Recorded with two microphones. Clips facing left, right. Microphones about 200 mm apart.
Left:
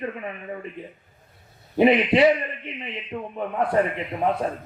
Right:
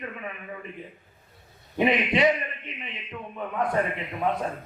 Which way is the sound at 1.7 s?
30° left (ahead or behind).